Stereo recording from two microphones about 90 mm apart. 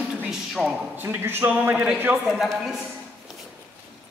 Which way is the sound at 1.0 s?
25° right (ahead or behind).